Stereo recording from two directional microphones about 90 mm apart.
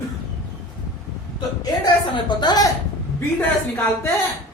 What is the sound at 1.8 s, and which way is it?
Speech, 50° left (ahead or behind).